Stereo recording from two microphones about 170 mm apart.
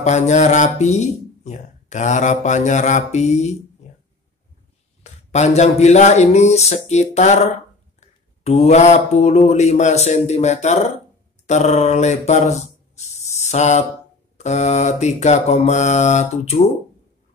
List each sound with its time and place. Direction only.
0.0 s speech: 45° left (ahead or behind)
3.8 s a sound: 40° left (ahead or behind)
5.0 s speech: 40° left (ahead or behind)